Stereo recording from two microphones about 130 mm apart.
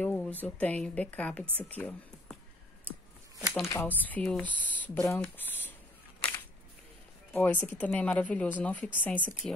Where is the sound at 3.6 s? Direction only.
20° left (ahead or behind).